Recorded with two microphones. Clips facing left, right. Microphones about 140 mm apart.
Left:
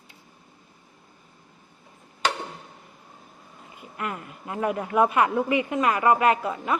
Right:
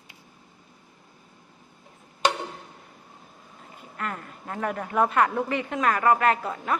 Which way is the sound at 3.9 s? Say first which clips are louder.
Left 1 dB; 10° left (ahead or behind).